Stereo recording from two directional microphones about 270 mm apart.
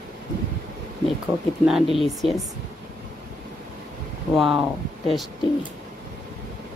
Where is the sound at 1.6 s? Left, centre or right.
Centre.